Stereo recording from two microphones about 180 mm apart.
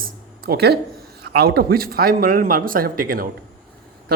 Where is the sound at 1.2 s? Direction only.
60° right (ahead or behind).